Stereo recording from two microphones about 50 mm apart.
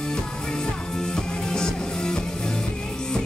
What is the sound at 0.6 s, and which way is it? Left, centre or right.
Music, centre.